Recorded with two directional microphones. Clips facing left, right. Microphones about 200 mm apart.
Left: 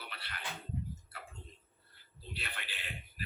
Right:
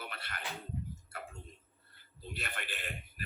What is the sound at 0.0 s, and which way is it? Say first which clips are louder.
Music: right 4 dB; 50° right (ahead or behind).